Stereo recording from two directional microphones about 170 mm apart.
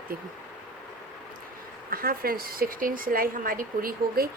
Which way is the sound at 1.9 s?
60° right (ahead or behind).